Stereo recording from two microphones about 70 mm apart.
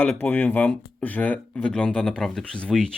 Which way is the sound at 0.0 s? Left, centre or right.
Left.